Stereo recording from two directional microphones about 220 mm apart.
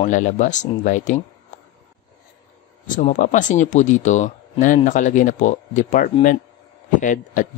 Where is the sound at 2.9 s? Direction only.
35° left (ahead or behind).